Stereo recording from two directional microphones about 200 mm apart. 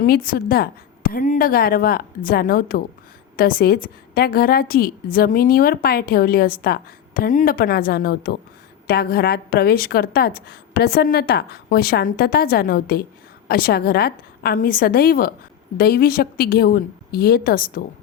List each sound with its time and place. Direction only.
0.0 s a woman's voice: 45° left (ahead or behind)